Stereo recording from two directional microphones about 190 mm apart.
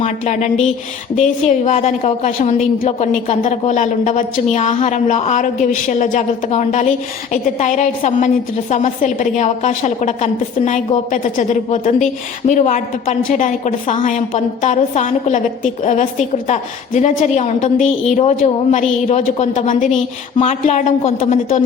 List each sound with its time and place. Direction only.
0.0 s a woman's voice: 40° left (ahead or behind)